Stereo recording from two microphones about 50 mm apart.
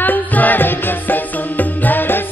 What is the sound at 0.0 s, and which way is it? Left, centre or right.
Music, left.